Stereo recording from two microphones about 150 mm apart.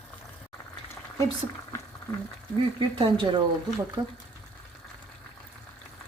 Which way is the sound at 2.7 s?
35° right (ahead or behind).